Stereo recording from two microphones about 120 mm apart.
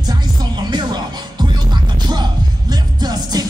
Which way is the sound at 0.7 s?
40° right (ahead or behind).